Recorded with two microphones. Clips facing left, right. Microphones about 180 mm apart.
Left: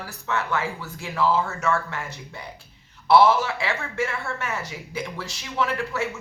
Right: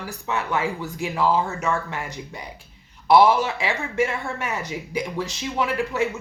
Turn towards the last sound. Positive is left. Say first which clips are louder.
# right 3 dB
turn(degrees=-15)  # may be behind; listen again after turning